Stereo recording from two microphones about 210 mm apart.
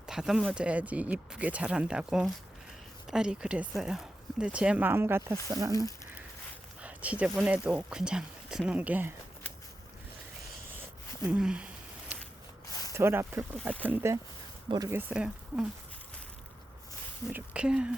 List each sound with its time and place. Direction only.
0.1 s speech: centre (ahead or behind)
6.8 s speech: 5° right (ahead or behind)
11.2 s a sound: 5° right (ahead or behind)
13.0 s speech: 10° right (ahead or behind)
17.3 s speech: 5° right (ahead or behind)